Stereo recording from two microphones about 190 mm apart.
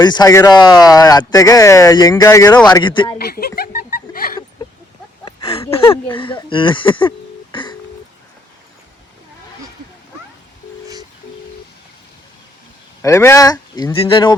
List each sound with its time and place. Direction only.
0.0 s speech: 20° left (ahead or behind)
3.2 s a sound: 55° left (ahead or behind)
5.6 s a sound: 15° left (ahead or behind)
6.1 s speech: 25° left (ahead or behind)
7.5 s telephone dialing: 25° left (ahead or behind)
13.0 s speech: 15° left (ahead or behind)